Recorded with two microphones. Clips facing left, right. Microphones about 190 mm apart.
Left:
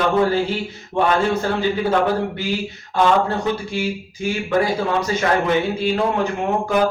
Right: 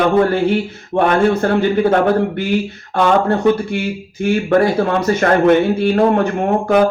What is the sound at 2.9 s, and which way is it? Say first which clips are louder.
Speech: right 3 dB; 60° right (ahead or behind).